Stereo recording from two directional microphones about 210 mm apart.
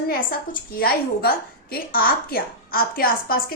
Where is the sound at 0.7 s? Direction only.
45° left (ahead or behind).